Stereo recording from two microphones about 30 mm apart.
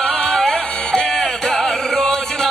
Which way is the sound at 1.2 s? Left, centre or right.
Centre.